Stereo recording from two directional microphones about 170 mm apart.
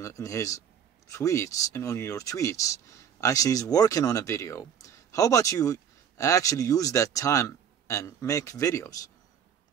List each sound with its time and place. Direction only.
0.0 s speech: 20° left (ahead or behind)